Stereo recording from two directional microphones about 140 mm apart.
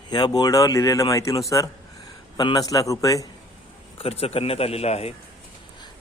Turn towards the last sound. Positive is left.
turn(degrees=50)  # may be behind; listen again after turning